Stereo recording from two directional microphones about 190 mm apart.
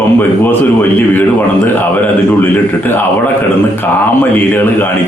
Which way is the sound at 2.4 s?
10° left (ahead or behind).